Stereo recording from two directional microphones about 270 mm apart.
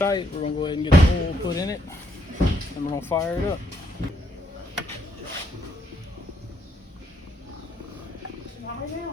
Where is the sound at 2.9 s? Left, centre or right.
Centre.